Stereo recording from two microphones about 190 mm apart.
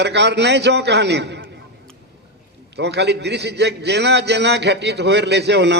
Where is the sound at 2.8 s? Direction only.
65° right (ahead or behind).